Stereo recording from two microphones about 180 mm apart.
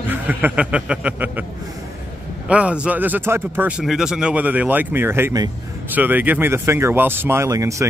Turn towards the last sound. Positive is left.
turn(degrees=-15)  # may be behind; listen again after turning